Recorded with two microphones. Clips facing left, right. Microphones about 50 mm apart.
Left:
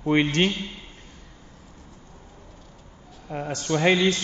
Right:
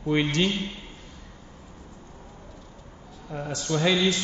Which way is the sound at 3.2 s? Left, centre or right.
Left.